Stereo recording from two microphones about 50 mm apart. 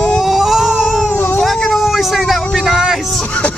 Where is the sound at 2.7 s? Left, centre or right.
Centre.